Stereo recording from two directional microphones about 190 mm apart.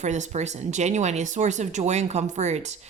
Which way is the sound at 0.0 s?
40° right (ahead or behind).